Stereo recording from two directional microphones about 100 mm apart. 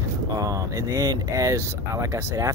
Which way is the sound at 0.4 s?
35° right (ahead or behind).